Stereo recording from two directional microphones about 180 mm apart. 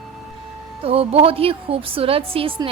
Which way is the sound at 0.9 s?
30° right (ahead or behind).